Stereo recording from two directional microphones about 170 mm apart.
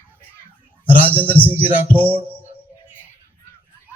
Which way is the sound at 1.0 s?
10° right (ahead or behind).